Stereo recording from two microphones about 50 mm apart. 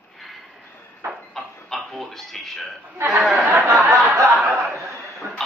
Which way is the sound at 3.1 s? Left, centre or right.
Centre.